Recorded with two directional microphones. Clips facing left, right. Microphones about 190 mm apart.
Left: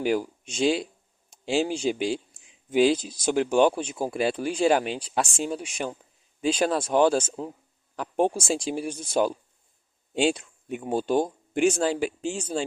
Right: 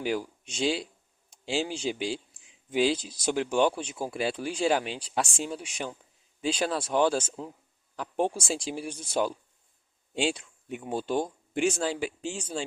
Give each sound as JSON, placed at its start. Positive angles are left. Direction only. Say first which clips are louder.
{"t": 0.0, "sound": "speech", "louder": "left 5 dB", "side_deg": 45}